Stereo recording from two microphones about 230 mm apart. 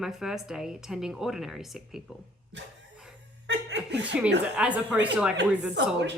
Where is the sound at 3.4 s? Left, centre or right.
Right.